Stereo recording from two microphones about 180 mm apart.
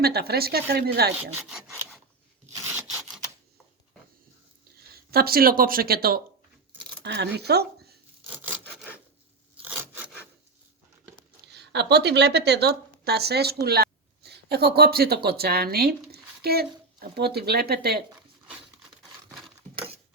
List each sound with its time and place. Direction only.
0.0 s speech: 60° right (ahead or behind)
4.8 s speech: 60° right (ahead or behind)
7.0 s speech: 70° right (ahead or behind)
8.6 s rub: 10° left (ahead or behind)
11.5 s a woman's voice: 70° right (ahead or behind)
13.7 s a sound: 60° right (ahead or behind)
14.8 s speech: 55° right (ahead or behind)